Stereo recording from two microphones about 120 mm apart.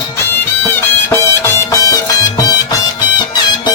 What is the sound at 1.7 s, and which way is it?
Music, 30° left (ahead or behind).